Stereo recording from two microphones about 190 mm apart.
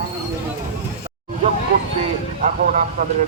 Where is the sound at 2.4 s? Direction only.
45° right (ahead or behind).